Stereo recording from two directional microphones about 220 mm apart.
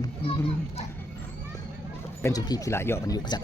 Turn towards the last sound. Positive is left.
turn(degrees=15)  # may be behind; listen again after turning